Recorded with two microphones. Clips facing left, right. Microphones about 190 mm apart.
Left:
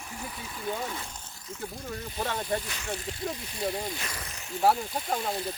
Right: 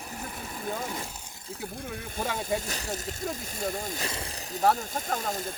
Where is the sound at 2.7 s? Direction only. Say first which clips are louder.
Right 1 dB; 40° right (ahead or behind).